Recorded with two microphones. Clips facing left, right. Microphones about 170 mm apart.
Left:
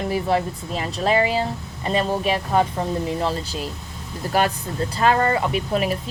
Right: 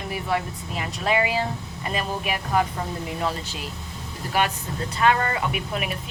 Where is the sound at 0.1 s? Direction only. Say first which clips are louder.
Left 3 dB; 35° left (ahead or behind).